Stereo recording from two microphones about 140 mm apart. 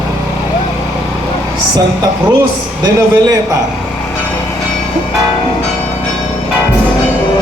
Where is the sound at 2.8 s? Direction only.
25° right (ahead or behind).